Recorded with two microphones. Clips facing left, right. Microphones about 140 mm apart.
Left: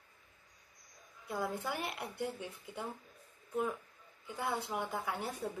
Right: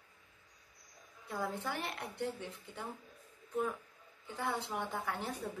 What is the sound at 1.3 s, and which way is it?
A woman's voice, 10° left (ahead or behind).